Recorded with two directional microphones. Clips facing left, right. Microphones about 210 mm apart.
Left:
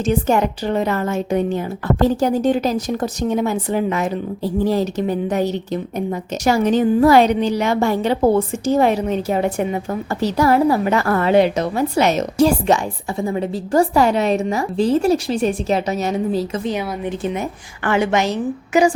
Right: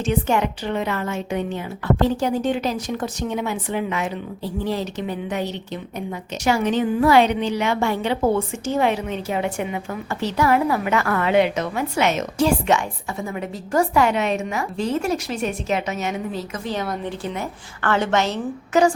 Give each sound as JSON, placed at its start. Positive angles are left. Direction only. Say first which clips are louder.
{"t": 0.0, "sound": "a woman's voice", "louder": "left 4 dB", "side_deg": 40}
{"t": 17.1, "sound": "a woman's voice", "louder": "left 5 dB", "side_deg": 20}